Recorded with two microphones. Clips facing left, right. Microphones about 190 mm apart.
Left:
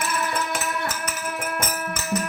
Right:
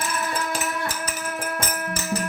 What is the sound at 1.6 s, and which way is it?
Music, 30° right (ahead or behind).